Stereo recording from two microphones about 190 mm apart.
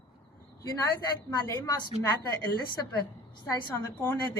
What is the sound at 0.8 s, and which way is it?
A woman's voice, 15° left (ahead or behind).